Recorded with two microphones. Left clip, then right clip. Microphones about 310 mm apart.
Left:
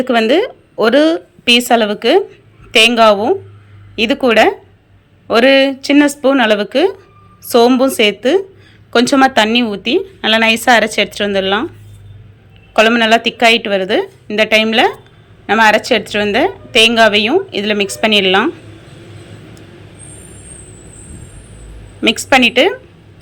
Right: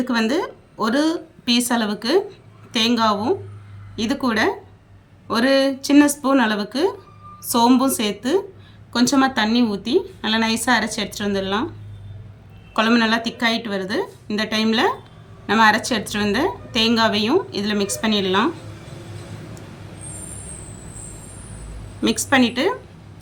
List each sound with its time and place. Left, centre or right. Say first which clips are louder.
0.0 s a woman's voice: left 10 dB; centre
12.7 s a woman's voice: left 9 dB; centre
22.0 s a woman's voice: left 8 dB; centre